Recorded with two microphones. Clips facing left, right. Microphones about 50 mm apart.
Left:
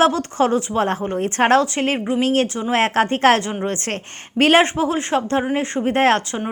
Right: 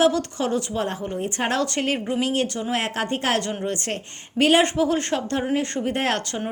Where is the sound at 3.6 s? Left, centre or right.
Left.